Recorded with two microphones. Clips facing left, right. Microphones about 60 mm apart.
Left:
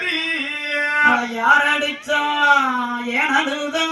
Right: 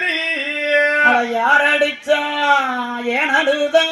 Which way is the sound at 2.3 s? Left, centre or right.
Centre.